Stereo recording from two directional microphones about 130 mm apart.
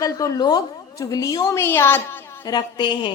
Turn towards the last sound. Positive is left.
turn(degrees=35)  # may be behind; listen again after turning